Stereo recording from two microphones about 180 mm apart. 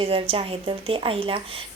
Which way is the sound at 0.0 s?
30° right (ahead or behind).